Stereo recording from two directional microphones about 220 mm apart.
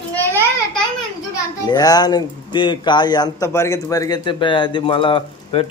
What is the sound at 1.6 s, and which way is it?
Speech, 15° left (ahead or behind).